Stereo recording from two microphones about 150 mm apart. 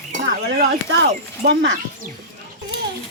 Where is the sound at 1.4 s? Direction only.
90° right.